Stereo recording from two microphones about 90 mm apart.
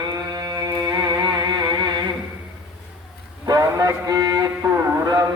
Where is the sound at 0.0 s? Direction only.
50° right (ahead or behind).